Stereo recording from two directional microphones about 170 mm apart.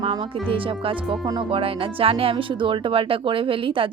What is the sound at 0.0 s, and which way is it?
Speech, 30° right (ahead or behind).